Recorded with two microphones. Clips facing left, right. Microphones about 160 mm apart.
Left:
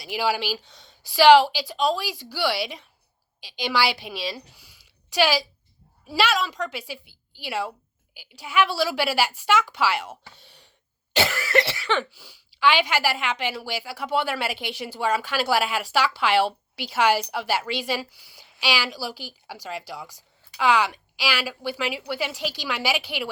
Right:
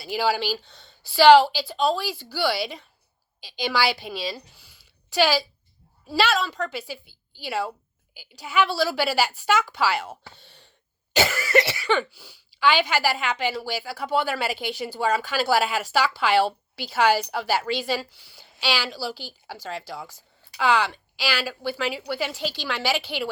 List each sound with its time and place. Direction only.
0.0 s speech: 5° left (ahead or behind)
6.1 s a woman's voice: 5° left (ahead or behind)